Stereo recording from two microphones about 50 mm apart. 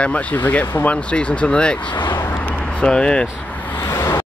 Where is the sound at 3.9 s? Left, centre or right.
Left.